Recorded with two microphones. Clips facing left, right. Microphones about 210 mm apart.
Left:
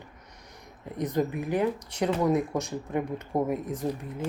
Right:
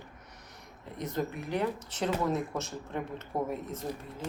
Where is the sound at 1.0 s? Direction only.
15° left (ahead or behind).